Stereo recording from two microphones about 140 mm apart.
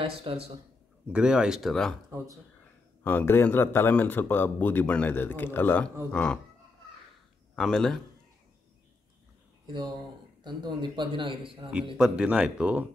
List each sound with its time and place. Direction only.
0.0 s speech: 40° right (ahead or behind)
1.0 s speech: 5° right (ahead or behind)
2.0 s speech: 20° right (ahead or behind)
3.0 s a man's voice: 10° left (ahead or behind)
7.5 s speech: 5° left (ahead or behind)
9.7 s speech: 30° right (ahead or behind)
12.0 s speech: 10° right (ahead or behind)